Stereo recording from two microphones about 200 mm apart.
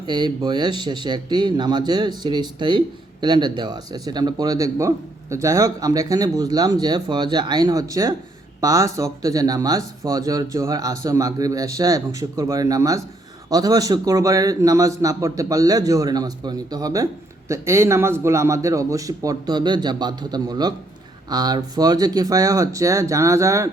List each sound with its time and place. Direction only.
0.0 s a man's voice: 20° right (ahead or behind)